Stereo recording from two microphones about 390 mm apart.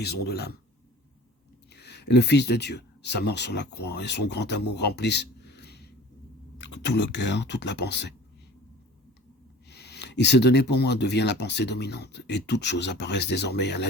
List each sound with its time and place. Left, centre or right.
0.0 s speech: left
1.7 s speech: left
4.7 s a sound: left
6.6 s speech: left
9.6 s speech: left